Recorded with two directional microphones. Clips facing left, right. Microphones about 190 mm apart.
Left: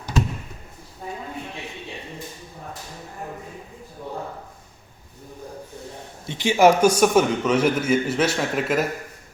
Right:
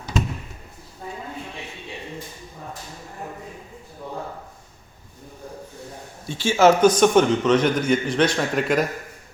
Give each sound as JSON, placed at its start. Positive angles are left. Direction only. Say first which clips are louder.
{"t": 6.2, "sound": "a man's voice", "louder": "even", "side_deg": 20}